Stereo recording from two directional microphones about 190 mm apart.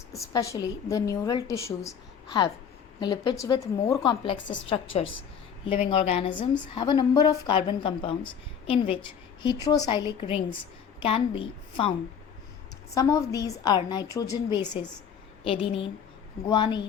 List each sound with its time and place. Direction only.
0.1 s a woman's voice: 15° left (ahead or behind)
4.1 s a woman's voice: 25° left (ahead or behind)
12.9 s a woman's voice: 15° left (ahead or behind)